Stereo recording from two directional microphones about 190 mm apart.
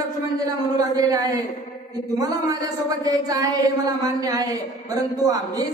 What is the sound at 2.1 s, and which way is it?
A woman's voice, 20° right (ahead or behind).